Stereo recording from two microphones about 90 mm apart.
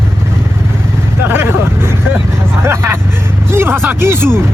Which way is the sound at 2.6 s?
30° right (ahead or behind).